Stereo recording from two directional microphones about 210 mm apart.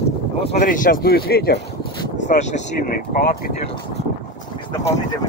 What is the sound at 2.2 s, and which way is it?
Speech, 35° left (ahead or behind).